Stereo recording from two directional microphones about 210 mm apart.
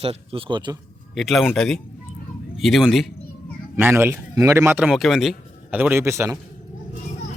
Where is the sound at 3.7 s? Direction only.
10° right (ahead or behind).